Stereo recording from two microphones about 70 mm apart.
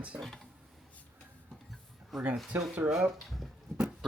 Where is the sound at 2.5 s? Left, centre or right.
Right.